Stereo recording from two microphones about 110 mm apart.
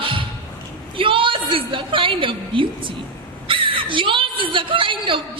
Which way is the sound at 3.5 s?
50° right (ahead or behind).